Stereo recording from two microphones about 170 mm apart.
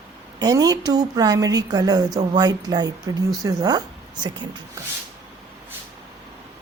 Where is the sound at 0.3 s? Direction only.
20° right (ahead or behind).